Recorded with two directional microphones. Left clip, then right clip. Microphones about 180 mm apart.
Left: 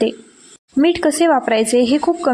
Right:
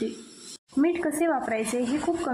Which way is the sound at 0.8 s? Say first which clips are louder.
Left 10 dB; 35° left (ahead or behind).